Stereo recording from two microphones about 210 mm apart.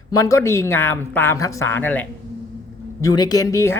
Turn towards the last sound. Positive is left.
turn(degrees=15)  # may be behind; listen again after turning